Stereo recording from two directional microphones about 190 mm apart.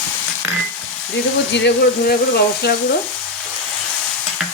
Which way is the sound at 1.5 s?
65° left (ahead or behind).